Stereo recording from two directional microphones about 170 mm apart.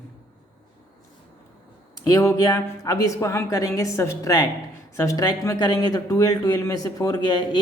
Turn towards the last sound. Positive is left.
turn(degrees=25)  # may be behind; listen again after turning